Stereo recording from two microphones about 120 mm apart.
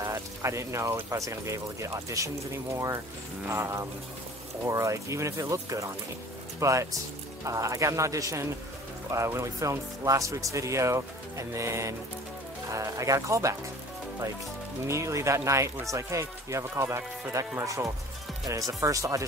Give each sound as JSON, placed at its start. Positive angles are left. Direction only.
{"t": 0.0, "sound": "speech", "side_deg": -25}
{"t": 14.9, "sound": "speech", "side_deg": -25}